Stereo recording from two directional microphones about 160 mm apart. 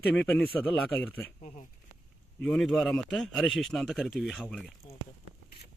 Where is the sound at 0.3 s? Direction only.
10° left (ahead or behind).